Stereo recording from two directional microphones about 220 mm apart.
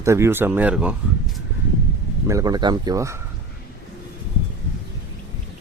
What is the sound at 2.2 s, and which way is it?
Speech, 15° right (ahead or behind).